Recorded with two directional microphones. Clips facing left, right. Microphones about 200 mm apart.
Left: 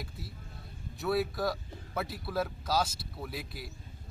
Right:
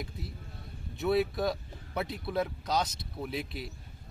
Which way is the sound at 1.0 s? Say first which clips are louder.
Right 3 dB; 20° right (ahead or behind).